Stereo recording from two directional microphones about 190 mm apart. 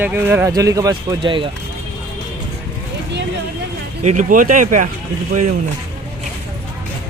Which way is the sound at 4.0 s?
45° right (ahead or behind).